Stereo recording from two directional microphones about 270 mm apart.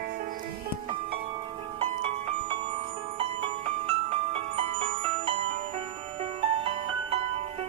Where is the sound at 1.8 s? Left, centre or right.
Right.